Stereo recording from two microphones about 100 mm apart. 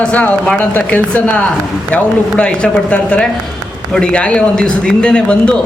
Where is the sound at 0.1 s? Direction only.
15° left (ahead or behind).